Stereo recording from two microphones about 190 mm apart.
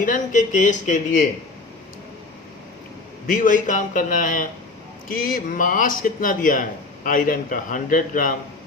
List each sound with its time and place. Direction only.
0.0 s speech: 45° left (ahead or behind)
3.2 s speech: 45° left (ahead or behind)